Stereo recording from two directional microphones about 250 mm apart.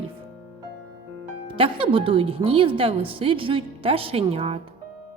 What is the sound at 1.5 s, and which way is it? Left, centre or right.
Speech, right.